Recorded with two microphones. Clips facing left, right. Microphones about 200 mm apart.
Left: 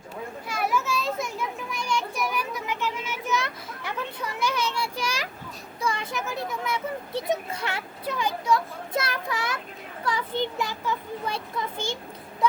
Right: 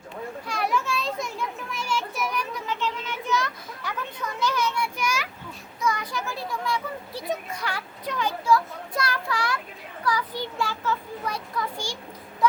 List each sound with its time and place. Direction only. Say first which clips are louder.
0.4 s children playing: even; 5° left (ahead or behind)
3.4 s children playing: right 1 dB; 25° left (ahead or behind)
4.7 s a sound: right 2 dB; 30° left (ahead or behind)
5.8 s a child's voice: right 1 dB; 30° left (ahead or behind)
8.0 s a child's voice: even; 10° left (ahead or behind)
8.4 s a child's voice: right 4 dB; 25° left (ahead or behind)